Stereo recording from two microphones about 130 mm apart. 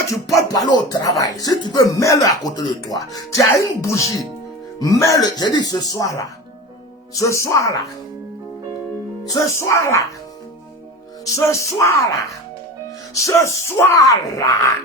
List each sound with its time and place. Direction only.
0.1 s speech: 25° left (ahead or behind)
9.3 s speech: 20° left (ahead or behind)
11.3 s speech: 20° left (ahead or behind)
13.2 s speech: 20° left (ahead or behind)